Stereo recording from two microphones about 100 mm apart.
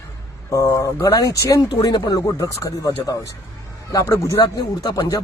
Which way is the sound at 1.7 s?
50° left (ahead or behind).